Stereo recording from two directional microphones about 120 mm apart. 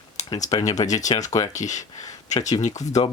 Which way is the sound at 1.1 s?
45° left (ahead or behind).